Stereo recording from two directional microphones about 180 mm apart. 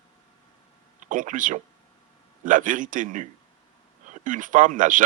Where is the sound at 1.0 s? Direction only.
45° right (ahead or behind).